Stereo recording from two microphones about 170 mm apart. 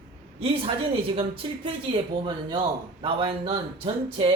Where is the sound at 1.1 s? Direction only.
35° right (ahead or behind).